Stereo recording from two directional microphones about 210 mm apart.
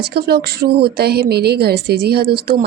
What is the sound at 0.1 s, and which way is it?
Speech, 50° right (ahead or behind).